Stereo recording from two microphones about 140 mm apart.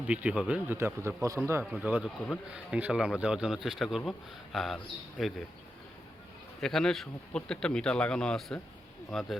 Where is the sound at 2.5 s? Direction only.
10° right (ahead or behind).